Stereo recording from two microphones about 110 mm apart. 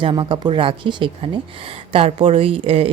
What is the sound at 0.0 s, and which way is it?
A woman's voice, 50° right (ahead or behind).